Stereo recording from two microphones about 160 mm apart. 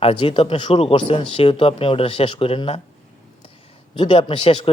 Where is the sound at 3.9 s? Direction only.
30° left (ahead or behind).